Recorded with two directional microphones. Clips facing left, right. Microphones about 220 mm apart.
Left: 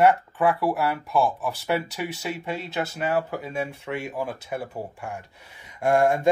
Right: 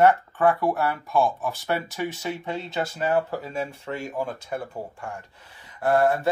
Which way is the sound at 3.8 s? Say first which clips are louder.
Even; 10° left (ahead or behind).